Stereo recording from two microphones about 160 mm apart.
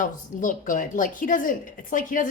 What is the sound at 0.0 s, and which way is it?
A woman's voice, 55° left (ahead or behind).